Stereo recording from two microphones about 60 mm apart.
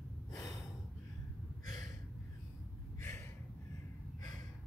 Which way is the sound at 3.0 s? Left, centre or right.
Left.